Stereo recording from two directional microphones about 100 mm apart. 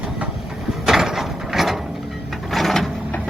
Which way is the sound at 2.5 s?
Centre (ahead or behind).